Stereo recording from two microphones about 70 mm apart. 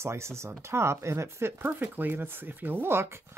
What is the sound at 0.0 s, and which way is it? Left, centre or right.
Speech, right.